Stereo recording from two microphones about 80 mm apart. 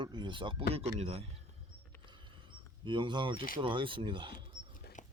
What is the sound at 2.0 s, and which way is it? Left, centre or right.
Speech, right.